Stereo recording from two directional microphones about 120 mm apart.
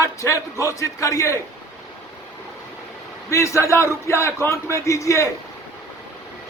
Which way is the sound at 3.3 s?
25° left (ahead or behind).